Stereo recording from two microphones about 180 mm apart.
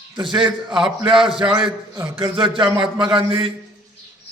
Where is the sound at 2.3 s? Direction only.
30° right (ahead or behind).